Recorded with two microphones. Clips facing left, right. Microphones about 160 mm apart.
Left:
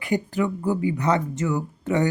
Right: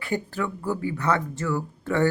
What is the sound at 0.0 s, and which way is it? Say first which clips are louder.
Speech: left 4 dB; 15° left (ahead or behind).